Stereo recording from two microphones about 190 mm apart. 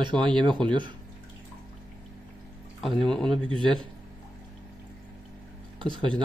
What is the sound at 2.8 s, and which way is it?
Speech, centre (ahead or behind).